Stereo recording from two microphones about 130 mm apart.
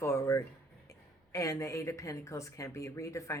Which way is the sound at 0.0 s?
20° left (ahead or behind).